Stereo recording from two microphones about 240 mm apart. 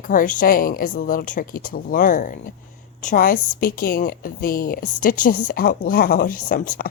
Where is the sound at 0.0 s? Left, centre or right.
Left.